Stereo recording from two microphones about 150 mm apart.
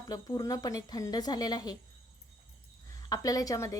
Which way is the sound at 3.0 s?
25° left (ahead or behind).